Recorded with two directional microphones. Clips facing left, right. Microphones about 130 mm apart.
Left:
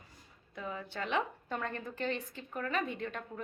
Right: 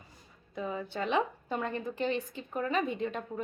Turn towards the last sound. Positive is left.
turn(degrees=-20)  # may be behind; listen again after turning